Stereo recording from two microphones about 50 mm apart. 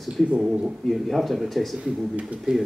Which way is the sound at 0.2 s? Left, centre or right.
Centre.